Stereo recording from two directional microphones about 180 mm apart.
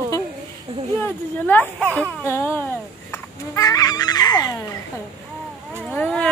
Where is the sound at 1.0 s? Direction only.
10° left (ahead or behind).